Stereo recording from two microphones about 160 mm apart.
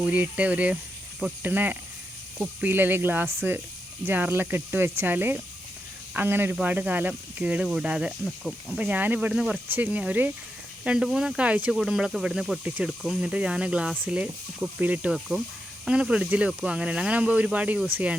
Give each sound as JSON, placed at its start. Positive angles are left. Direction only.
{"t": 0.1, "sound": "speech", "side_deg": -10}